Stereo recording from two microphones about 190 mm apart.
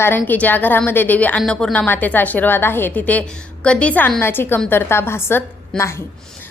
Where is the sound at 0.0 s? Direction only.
10° left (ahead or behind).